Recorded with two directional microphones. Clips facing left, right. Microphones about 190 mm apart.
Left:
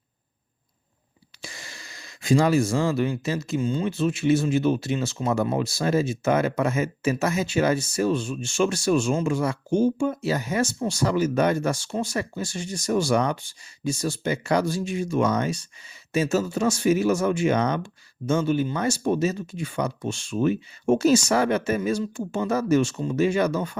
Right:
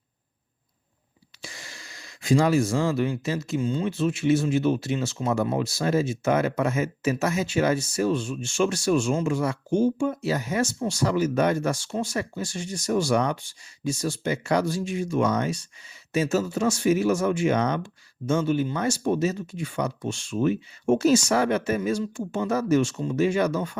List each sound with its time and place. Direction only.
1.4 s speech: 35° left (ahead or behind)